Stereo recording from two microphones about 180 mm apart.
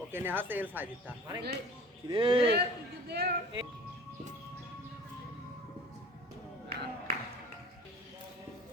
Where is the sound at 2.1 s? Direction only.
30° right (ahead or behind).